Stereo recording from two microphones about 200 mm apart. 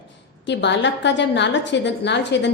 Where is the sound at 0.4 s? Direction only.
60° left (ahead or behind).